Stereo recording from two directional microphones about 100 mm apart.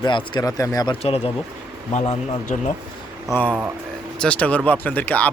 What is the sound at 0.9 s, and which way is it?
Speech, 85° left.